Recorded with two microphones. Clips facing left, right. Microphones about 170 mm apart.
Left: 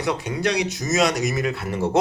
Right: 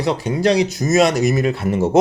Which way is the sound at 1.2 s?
25° right (ahead or behind).